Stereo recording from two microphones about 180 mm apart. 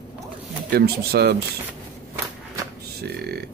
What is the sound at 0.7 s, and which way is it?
Speech, 65° right (ahead or behind).